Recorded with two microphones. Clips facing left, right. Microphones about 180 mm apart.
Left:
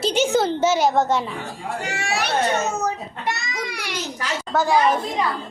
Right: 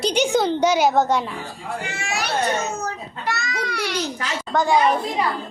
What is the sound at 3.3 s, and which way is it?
Babbling, 15° left (ahead or behind).